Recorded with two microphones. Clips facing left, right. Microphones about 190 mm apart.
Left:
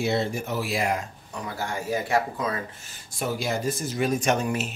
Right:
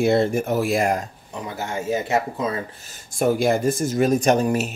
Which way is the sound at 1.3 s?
20° right (ahead or behind).